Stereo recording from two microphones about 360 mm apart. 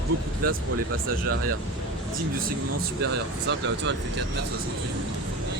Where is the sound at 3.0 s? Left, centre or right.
Right.